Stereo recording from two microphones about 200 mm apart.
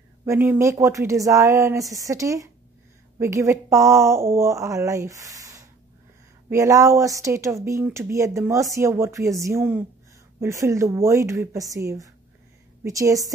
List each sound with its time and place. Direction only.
0.2 s speech: 10° right (ahead or behind)